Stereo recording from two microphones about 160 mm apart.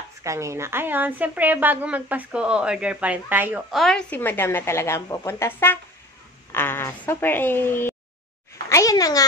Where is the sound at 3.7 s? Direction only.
Centre (ahead or behind).